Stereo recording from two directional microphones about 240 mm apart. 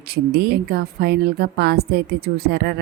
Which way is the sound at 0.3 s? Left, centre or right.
Right.